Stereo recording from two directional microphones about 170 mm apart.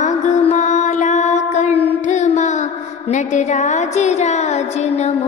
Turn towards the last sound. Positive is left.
turn(degrees=40)  # may be behind; listen again after turning